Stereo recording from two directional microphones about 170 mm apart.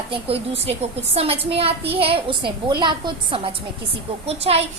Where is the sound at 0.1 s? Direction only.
35° right (ahead or behind).